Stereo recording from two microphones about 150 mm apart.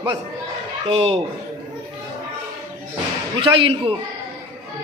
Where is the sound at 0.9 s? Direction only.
40° right (ahead or behind).